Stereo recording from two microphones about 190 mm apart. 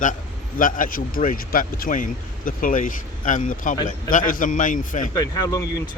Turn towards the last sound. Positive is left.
turn(degrees=20)  # may be behind; listen again after turning